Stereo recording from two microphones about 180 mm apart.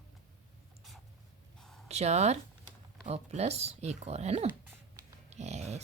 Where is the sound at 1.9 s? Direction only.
35° right (ahead or behind).